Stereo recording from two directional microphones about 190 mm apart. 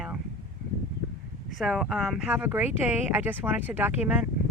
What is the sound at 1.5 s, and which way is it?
Speech, centre (ahead or behind).